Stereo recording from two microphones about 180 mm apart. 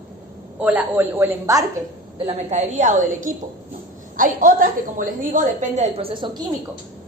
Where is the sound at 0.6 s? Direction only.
10° right (ahead or behind).